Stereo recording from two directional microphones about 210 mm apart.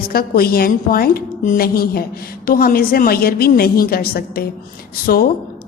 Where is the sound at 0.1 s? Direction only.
45° left (ahead or behind).